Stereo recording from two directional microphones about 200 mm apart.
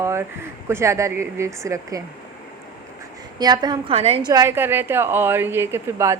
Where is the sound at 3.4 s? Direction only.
20° right (ahead or behind).